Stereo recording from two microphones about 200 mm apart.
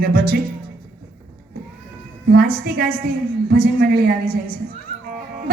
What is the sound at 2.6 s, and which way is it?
A woman's voice, 50° right (ahead or behind).